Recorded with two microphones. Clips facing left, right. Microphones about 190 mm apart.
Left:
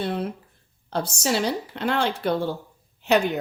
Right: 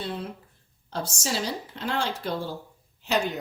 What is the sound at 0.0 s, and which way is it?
Speech, 65° left (ahead or behind).